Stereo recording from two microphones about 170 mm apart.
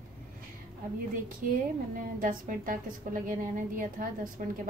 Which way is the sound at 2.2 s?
55° right (ahead or behind).